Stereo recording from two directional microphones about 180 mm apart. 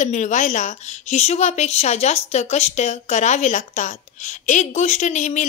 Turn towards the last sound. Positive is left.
turn(degrees=40)  # may be behind; listen again after turning